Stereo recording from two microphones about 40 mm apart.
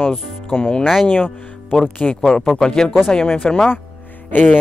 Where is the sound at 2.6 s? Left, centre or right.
Centre.